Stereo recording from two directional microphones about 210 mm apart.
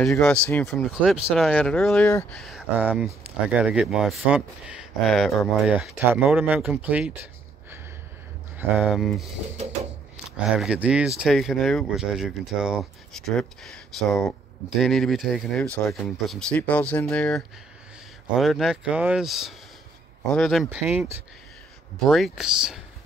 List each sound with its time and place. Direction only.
0.0 s speech: 5° left (ahead or behind)
2.4 s speech: 5° right (ahead or behind)
8.5 s speech: 5° right (ahead or behind)
18.4 s speech: centre (ahead or behind)